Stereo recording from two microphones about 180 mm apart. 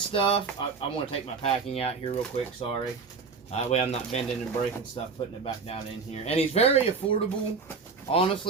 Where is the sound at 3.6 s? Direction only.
35° left (ahead or behind).